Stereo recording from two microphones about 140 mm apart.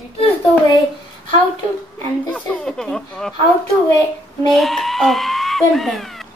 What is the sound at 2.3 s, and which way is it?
Speech, 5° left (ahead or behind).